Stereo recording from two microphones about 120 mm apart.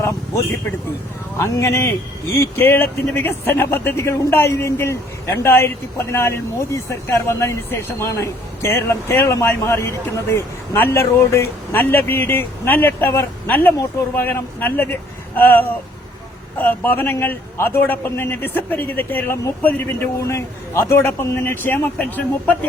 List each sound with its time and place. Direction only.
1.4 s a man's voice: 25° left (ahead or behind)